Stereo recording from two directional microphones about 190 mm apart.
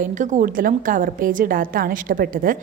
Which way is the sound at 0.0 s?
40° right (ahead or behind).